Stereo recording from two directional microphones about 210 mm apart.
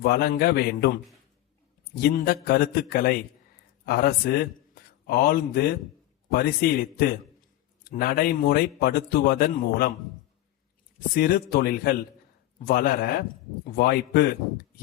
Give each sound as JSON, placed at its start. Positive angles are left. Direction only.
{"t": 0.0, "sound": "a man's voice", "side_deg": 50}
{"t": 2.0, "sound": "a man's voice", "side_deg": 45}
{"t": 11.1, "sound": "a man's voice", "side_deg": 45}